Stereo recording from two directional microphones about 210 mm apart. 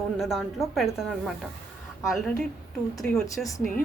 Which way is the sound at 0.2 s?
Centre (ahead or behind).